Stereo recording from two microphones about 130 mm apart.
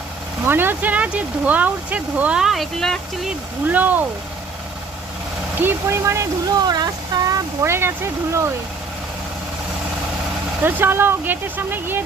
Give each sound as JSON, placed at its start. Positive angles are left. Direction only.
{"t": 0.4, "sound": "speech", "side_deg": -15}
{"t": 3.7, "sound": "speech", "side_deg": -15}
{"t": 5.5, "sound": "speech", "side_deg": -20}
{"t": 10.6, "sound": "speech", "side_deg": -15}